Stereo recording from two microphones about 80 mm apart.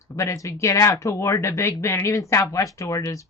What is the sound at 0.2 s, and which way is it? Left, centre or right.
Speech, left.